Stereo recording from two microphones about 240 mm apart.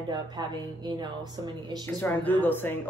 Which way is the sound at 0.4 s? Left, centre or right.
Centre.